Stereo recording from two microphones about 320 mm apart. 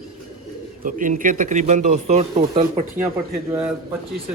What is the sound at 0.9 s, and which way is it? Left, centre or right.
A man's voice, right.